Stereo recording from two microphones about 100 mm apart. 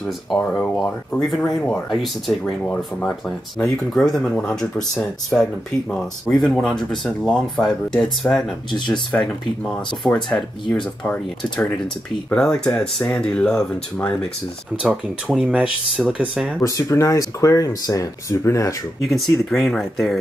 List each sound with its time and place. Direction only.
0.0 s speech: 5° left (ahead or behind)
3.3 s speech: centre (ahead or behind)
10.0 s speech: 10° left (ahead or behind)
14.8 s speech: 10° right (ahead or behind)
16.6 s speech: 30° left (ahead or behind)
19.0 s speech: centre (ahead or behind)